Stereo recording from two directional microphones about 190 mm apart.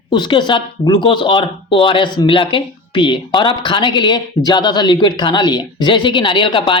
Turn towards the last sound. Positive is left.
turn(degrees=25)  # may be behind; listen again after turning